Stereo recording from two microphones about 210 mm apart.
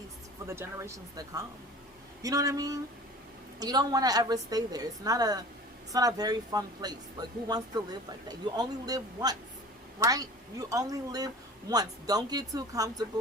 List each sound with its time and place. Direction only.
0.4 s a woman's voice: 10° right (ahead or behind)